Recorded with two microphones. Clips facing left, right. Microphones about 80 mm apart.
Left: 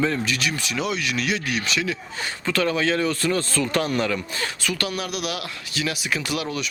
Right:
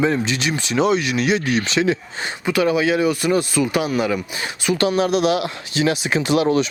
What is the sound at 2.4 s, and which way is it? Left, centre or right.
Speech, centre.